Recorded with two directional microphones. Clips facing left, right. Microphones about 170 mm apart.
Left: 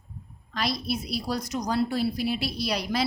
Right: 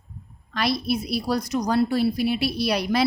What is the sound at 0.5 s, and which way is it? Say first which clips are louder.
A woman's voice: right 5 dB; 65° right (ahead or behind).